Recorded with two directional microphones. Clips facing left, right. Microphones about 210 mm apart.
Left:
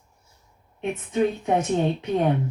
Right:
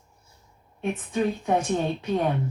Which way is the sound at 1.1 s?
20° left (ahead or behind).